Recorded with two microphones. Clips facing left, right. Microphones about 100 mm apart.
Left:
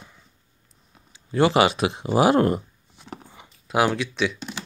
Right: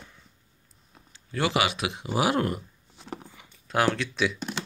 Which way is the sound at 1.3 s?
35° left (ahead or behind).